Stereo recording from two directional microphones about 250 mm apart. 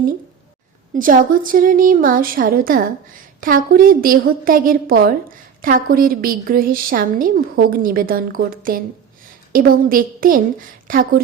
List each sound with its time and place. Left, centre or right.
0.9 s a woman's voice: right